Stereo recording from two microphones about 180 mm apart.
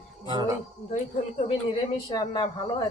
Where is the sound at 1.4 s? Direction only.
30° left (ahead or behind).